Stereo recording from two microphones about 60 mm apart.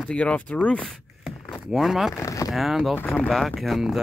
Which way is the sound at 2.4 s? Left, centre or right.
Centre.